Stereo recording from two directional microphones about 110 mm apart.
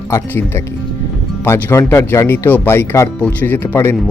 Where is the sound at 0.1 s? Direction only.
25° left (ahead or behind).